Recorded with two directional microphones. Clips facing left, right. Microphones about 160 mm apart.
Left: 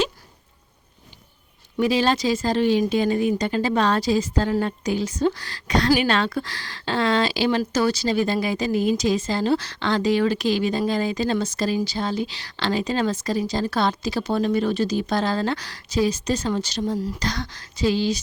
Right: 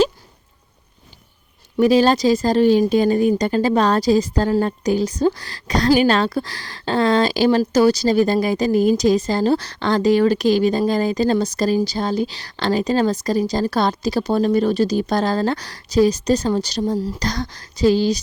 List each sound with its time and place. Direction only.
1.8 s speech: 40° right (ahead or behind)